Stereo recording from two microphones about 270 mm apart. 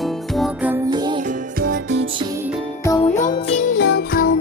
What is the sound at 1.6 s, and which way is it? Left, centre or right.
Music, right.